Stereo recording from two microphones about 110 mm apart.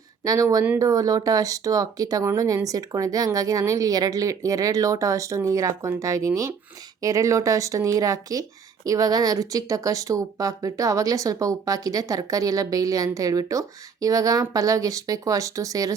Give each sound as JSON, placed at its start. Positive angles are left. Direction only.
{"t": 0.3, "sound": "speech", "side_deg": -30}